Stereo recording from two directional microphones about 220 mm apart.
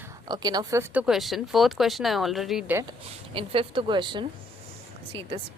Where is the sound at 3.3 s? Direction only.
25° right (ahead or behind).